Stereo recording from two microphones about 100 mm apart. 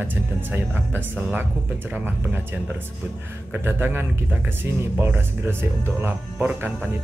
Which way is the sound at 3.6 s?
20° right (ahead or behind).